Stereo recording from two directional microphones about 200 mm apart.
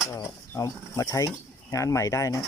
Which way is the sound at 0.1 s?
15° left (ahead or behind).